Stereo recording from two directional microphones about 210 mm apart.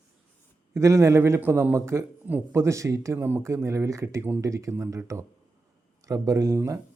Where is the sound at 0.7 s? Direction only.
15° right (ahead or behind).